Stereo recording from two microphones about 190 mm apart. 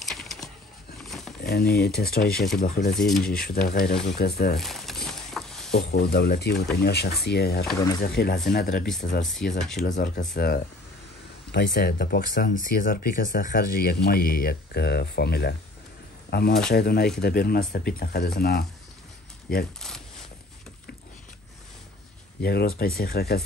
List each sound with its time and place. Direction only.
0.0 s a sound: centre (ahead or behind)
1.4 s speech: 55° left (ahead or behind)
2.9 s speech: centre (ahead or behind)
3.3 s speech: 50° left (ahead or behind)
4.6 s a sound: centre (ahead or behind)
5.8 s speech: 60° left (ahead or behind)
9.6 s speech: centre (ahead or behind)
9.8 s speech: 40° left (ahead or behind)
10.3 s speech: 55° left (ahead or behind)
22.4 s speech: 55° left (ahead or behind)